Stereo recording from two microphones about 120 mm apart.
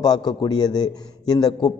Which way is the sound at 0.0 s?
35° left (ahead or behind).